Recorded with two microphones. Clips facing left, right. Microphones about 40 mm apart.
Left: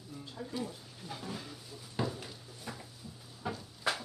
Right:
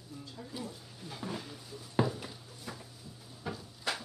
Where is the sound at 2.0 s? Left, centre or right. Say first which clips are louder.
Right 3 dB; centre.